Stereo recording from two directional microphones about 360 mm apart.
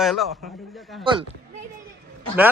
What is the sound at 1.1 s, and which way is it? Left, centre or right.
Speech, centre.